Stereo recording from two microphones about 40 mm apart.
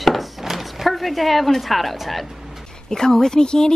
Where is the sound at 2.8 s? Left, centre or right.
Centre.